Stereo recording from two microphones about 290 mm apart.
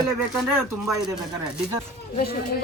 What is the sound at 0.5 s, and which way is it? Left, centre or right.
Speech, centre.